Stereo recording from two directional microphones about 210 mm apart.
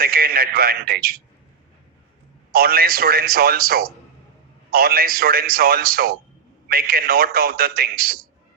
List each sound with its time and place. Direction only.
0.0 s a man's voice: 45° right (ahead or behind)
2.5 s a man's voice: 45° right (ahead or behind)